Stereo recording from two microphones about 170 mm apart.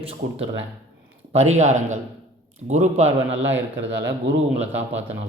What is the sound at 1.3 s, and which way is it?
A man's voice, 40° right (ahead or behind).